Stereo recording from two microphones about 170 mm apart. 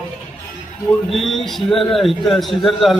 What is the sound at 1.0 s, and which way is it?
A man's voice, centre (ahead or behind).